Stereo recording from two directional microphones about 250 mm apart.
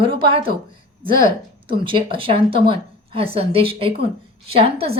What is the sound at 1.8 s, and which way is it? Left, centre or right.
A woman's voice, right.